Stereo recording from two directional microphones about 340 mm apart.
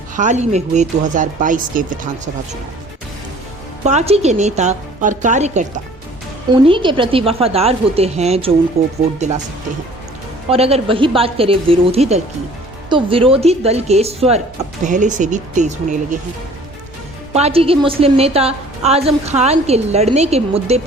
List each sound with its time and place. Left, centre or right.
0.2 s a woman's voice: right
3.8 s a woman's voice: centre
10.5 s a woman's voice: centre
17.3 s a woman's voice: centre